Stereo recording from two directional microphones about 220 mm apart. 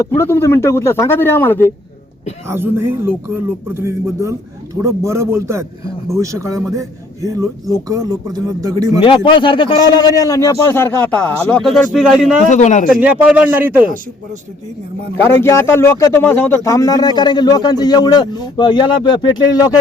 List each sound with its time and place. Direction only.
0.2 s a man's voice: 10° left (ahead or behind)
2.5 s a man's voice: 10° right (ahead or behind)
9.0 s a man's voice: 25° left (ahead or behind); by 12.3 s centre (ahead or behind)
12.5 s a man's voice: 30° left (ahead or behind)
12.9 s speech: 5° right (ahead or behind)
15.4 s a man's voice: 10° left (ahead or behind)